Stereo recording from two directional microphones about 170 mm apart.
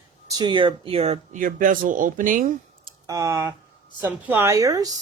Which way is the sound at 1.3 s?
50° right (ahead or behind).